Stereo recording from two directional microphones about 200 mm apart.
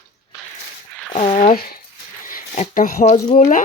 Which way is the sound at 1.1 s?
35° left (ahead or behind).